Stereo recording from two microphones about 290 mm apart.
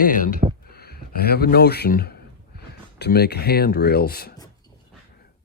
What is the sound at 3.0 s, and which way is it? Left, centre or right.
Speech, left.